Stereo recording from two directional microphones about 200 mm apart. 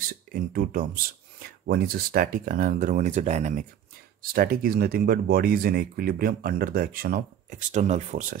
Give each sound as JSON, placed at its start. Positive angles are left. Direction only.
{"t": 0.0, "sound": "speech", "side_deg": -45}
{"t": 4.2, "sound": "speech", "side_deg": -50}